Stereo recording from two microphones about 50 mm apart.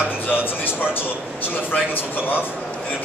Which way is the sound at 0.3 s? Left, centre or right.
Left.